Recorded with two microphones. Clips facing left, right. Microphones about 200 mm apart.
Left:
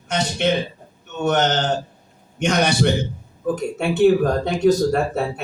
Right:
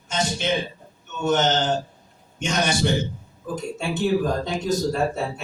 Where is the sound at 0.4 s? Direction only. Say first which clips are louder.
Left 6 dB; 65° left (ahead or behind).